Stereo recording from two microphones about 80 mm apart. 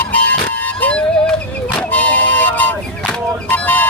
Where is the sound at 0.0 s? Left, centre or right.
Left.